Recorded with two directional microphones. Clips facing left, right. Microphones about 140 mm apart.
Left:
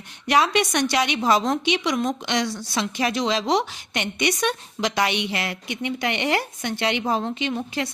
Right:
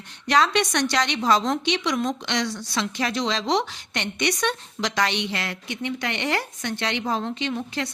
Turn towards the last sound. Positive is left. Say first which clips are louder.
# left 2 dB
turn(degrees=15)  # may be behind; listen again after turning